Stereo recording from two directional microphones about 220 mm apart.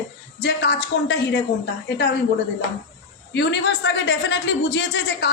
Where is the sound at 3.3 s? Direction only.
50° left (ahead or behind).